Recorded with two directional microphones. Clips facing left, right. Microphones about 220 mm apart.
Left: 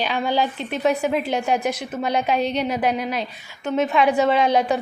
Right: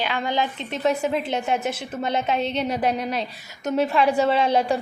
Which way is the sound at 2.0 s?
25° right (ahead or behind).